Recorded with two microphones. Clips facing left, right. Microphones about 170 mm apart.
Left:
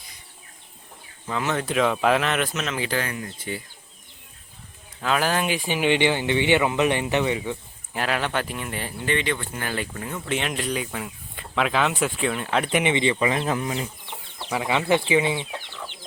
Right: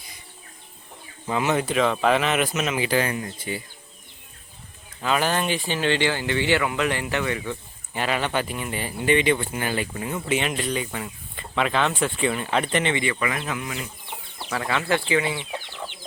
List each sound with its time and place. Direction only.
1.3 s speech: 15° right (ahead or behind)
1.6 s speech: centre (ahead or behind)
4.9 s speech: centre (ahead or behind); by 7.5 s 15° left (ahead or behind)
7.9 s speech: centre (ahead or behind)
9.0 s speech: 15° right (ahead or behind)
12.7 s speech: 15° left (ahead or behind); by 13.8 s 35° left (ahead or behind)
14.5 s speech: 15° left (ahead or behind)